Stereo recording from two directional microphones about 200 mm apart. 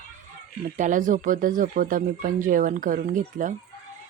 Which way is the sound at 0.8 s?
40° right (ahead or behind).